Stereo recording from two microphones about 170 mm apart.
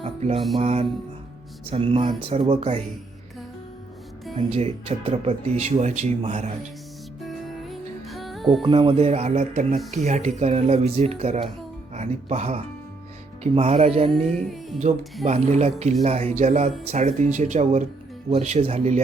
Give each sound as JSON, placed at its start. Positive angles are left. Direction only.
{"t": 0.0, "sound": "music", "side_deg": -35}
{"t": 0.5, "sound": "speech", "side_deg": -35}
{"t": 4.4, "sound": "speech", "side_deg": -35}
{"t": 7.2, "sound": "music", "side_deg": 0}
{"t": 8.6, "sound": "speech", "side_deg": -30}
{"t": 14.1, "sound": "music", "side_deg": 0}
{"t": 15.2, "sound": "speech", "side_deg": -40}